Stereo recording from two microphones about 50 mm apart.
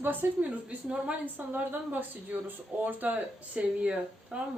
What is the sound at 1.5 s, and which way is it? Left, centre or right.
A woman's voice, right.